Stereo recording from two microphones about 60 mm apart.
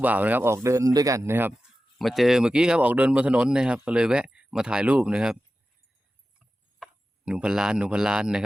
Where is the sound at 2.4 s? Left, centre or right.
Centre.